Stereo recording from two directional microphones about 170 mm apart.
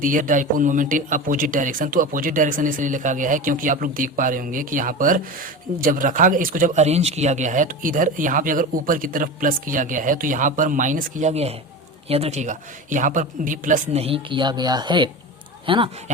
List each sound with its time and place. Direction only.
0.0 s speech: 50° right (ahead or behind); by 15.9 s 30° right (ahead or behind)